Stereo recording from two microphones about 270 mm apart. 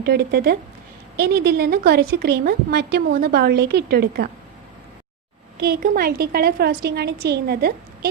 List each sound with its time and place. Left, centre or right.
0.0 s a woman's voice: right
5.5 s a woman's voice: right